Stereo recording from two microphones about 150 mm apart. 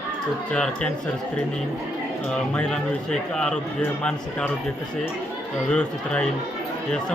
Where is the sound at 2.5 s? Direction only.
5° left (ahead or behind).